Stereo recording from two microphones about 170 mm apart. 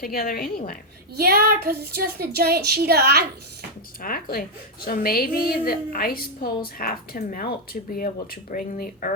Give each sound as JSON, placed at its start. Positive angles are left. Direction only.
{"t": 0.0, "sound": "a woman's voice", "side_deg": 60}
{"t": 1.1, "sound": "a sound", "side_deg": -65}
{"t": 1.6, "sound": "a woman's voice", "side_deg": -65}
{"t": 4.0, "sound": "a woman's voice", "side_deg": 60}